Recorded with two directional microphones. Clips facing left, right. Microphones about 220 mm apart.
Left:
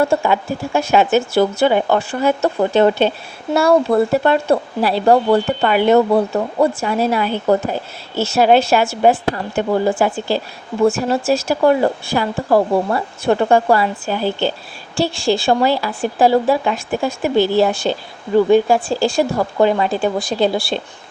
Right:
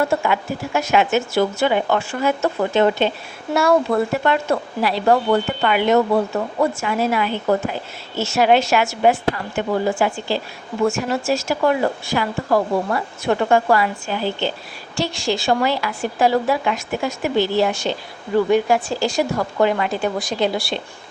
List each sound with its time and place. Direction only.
0.0 s speech: 30° left (ahead or behind)